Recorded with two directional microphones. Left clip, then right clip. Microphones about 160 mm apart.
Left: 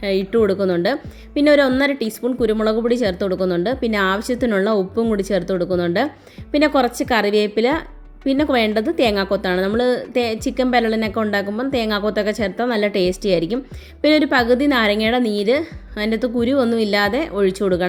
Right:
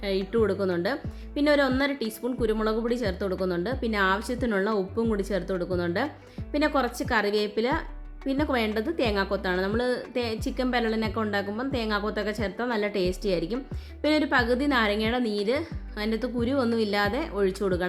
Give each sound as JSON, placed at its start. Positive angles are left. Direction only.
{"t": 0.0, "sound": "a woman's voice", "side_deg": 20}